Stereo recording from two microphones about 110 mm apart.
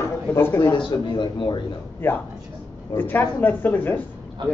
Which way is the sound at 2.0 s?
20° left (ahead or behind).